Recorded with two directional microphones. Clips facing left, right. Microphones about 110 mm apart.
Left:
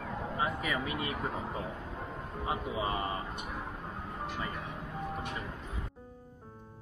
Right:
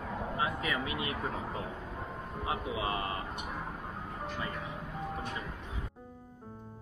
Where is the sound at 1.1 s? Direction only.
5° left (ahead or behind).